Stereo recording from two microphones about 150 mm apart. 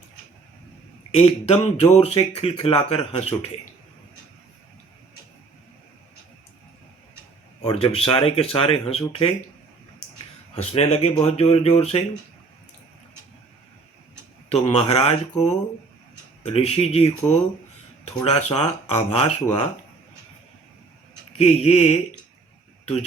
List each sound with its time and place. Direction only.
1.1 s speech: 40° left (ahead or behind)
7.6 s speech: 40° left (ahead or behind)
10.5 s speech: 45° left (ahead or behind)
14.5 s speech: 40° left (ahead or behind)
21.3 s speech: 45° left (ahead or behind)